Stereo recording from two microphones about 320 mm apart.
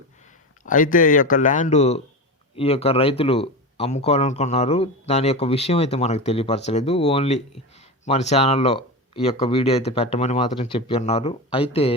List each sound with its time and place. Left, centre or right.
0.6 s speech: left